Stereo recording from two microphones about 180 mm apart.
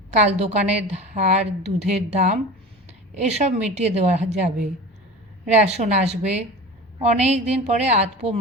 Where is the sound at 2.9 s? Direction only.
35° right (ahead or behind).